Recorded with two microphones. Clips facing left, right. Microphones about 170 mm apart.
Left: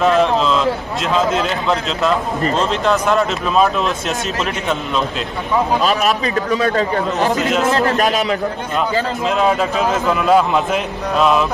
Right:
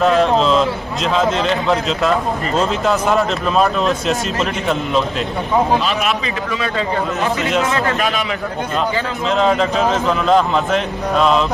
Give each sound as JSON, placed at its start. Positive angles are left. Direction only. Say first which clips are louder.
{"t": 0.0, "sound": "a man's voice", "louder": "right 1 dB", "side_deg": 0}
{"t": 5.9, "sound": "a man's voice", "louder": "left 3 dB", "side_deg": 40}
{"t": 9.3, "sound": "a man's voice", "louder": "right 2 dB", "side_deg": 5}